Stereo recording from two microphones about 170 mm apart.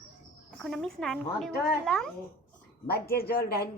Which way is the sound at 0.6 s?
5° left (ahead or behind).